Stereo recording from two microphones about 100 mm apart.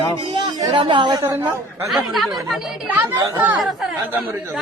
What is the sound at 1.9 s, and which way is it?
Speech, centre (ahead or behind).